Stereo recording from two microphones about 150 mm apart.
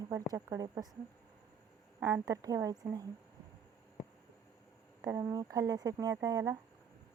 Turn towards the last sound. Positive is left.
turn(degrees=-20)  # may be behind; listen again after turning